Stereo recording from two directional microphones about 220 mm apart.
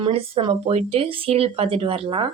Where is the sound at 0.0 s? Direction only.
25° right (ahead or behind).